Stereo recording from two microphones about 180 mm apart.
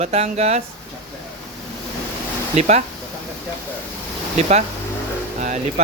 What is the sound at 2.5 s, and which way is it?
Speech, 40° right (ahead or behind).